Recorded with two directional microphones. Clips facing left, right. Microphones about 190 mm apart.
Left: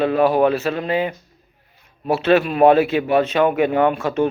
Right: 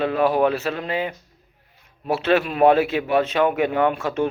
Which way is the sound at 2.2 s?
20° left (ahead or behind).